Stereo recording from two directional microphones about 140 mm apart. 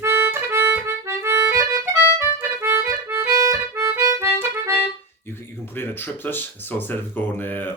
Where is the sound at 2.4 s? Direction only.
15° right (ahead or behind).